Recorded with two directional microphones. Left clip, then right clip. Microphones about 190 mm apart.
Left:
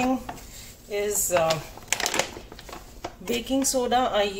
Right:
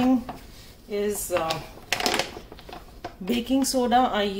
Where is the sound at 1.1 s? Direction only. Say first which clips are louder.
Left 3 dB; centre (ahead or behind).